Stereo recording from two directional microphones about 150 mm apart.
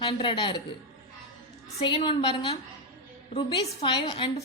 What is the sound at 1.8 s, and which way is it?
A woman's voice, 35° left (ahead or behind).